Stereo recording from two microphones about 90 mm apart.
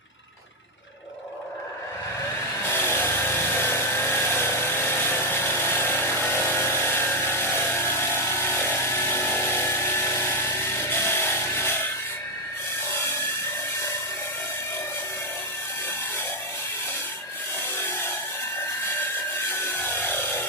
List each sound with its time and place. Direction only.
2.6 s vehicle: 25° left (ahead or behind)
19.8 s wood: 25° left (ahead or behind)